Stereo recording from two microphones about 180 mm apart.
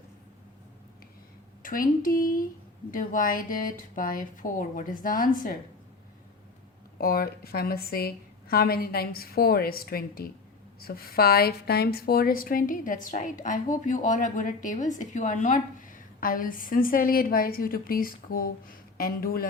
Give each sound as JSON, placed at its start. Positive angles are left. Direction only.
{"t": 1.6, "sound": "a woman's voice", "side_deg": 50}
{"t": 7.0, "sound": "a woman's voice", "side_deg": 55}